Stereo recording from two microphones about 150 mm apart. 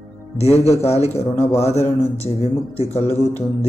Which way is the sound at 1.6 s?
45° left (ahead or behind).